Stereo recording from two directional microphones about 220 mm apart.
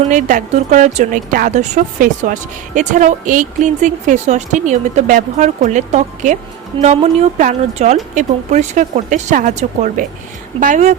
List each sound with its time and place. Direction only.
0.1 s speech: 35° right (ahead or behind)